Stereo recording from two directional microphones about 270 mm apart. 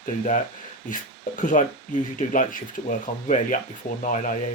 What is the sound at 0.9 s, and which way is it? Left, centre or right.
Speech, left.